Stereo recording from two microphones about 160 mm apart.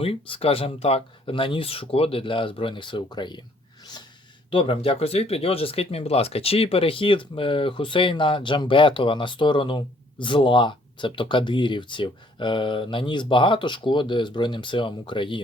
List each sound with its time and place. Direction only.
0.0 s speech: 35° left (ahead or behind)
4.5 s speech: 35° left (ahead or behind)